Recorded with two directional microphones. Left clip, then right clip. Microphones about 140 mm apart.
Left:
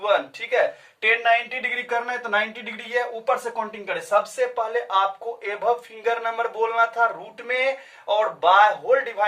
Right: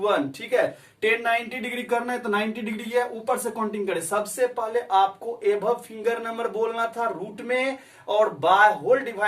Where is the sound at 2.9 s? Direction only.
30° left (ahead or behind).